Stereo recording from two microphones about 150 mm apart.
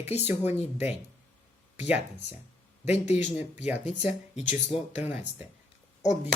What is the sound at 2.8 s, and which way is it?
Speech, 45° left (ahead or behind).